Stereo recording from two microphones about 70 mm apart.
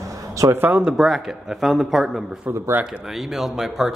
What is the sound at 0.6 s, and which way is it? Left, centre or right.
Speech, right.